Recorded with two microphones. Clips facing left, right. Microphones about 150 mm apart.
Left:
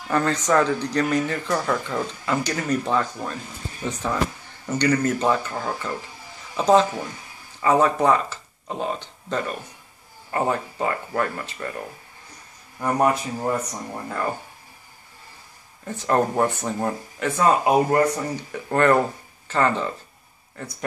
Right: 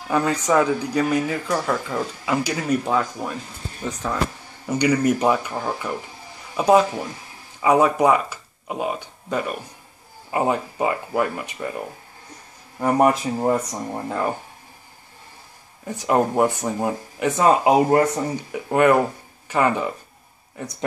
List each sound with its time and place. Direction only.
0.1 s speech: 10° right (ahead or behind)
4.6 s speech: 10° right (ahead or behind)
15.8 s speech: 10° right (ahead or behind)
18.5 s speech: 10° right (ahead or behind)